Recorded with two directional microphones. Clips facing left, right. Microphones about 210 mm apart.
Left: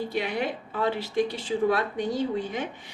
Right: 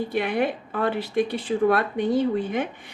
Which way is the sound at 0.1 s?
55° right (ahead or behind).